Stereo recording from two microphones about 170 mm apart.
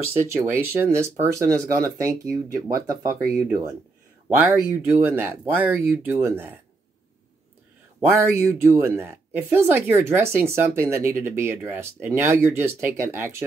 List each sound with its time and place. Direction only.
0.4 s speech: 15° right (ahead or behind)
8.1 s speech: 15° right (ahead or behind)